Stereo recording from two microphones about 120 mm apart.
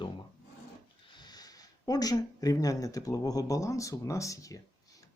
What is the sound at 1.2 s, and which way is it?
Speech, 35° left (ahead or behind).